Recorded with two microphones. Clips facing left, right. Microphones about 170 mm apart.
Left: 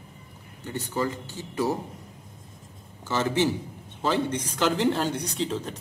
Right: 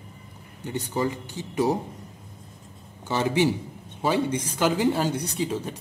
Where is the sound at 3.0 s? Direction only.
15° right (ahead or behind).